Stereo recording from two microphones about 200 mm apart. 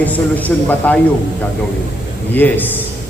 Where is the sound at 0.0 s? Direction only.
10° left (ahead or behind).